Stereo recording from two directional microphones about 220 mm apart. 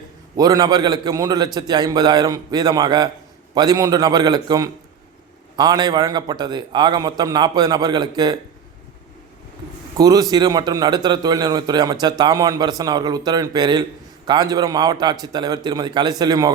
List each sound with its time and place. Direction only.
0.3 s a man's voice: 15° right (ahead or behind)
10.0 s a man's voice: 15° right (ahead or behind)